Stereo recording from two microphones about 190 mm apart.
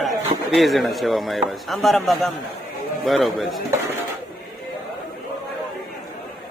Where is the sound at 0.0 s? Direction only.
Centre (ahead or behind).